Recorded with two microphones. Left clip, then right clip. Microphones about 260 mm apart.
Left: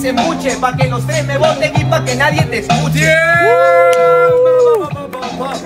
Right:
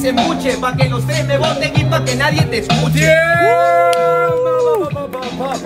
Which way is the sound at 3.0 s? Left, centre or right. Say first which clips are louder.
Left 1 dB; left.